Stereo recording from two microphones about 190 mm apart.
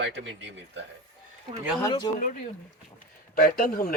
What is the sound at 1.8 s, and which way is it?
Speech, 25° left (ahead or behind).